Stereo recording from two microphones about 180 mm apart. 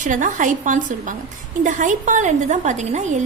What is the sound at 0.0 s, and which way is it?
A woman's voice, 45° right (ahead or behind).